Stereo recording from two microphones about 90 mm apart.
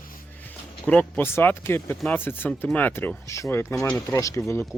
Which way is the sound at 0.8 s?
15° left (ahead or behind).